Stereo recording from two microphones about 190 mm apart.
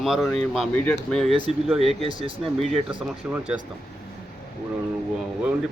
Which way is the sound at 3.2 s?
10° right (ahead or behind).